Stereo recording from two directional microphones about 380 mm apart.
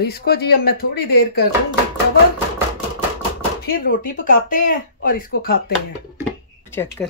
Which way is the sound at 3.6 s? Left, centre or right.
Left.